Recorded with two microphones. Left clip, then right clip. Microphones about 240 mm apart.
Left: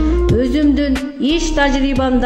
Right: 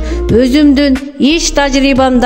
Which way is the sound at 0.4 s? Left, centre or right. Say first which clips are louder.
Right 10 dB; right.